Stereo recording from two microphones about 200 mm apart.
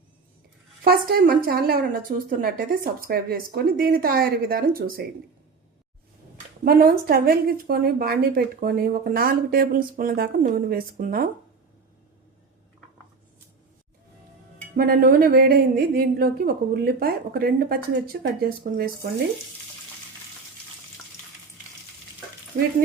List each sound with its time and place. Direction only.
0.9 s a woman's voice: 45° right (ahead or behind)
6.7 s a woman's voice: 50° right (ahead or behind)
14.8 s a woman's voice: 45° right (ahead or behind)
22.5 s a woman's voice: 45° right (ahead or behind)